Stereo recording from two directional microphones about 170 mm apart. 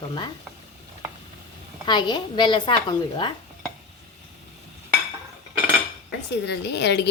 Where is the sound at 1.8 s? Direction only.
25° left (ahead or behind).